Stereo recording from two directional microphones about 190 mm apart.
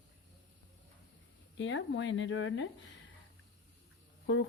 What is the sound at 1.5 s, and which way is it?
Speech, 75° left (ahead or behind).